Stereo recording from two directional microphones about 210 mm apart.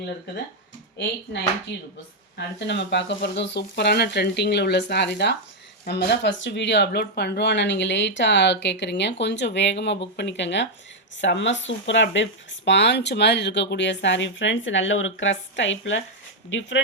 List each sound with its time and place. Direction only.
2.6 s speech: 55° left (ahead or behind)